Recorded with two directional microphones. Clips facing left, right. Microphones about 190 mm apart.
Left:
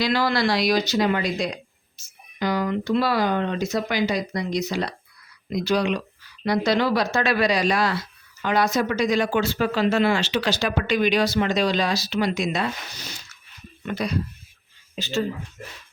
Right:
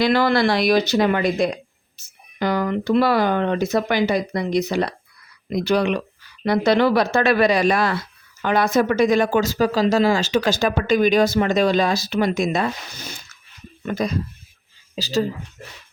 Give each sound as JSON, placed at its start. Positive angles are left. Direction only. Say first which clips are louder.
{"t": 0.0, "sound": "speech", "louder": "right 5 dB", "side_deg": -55}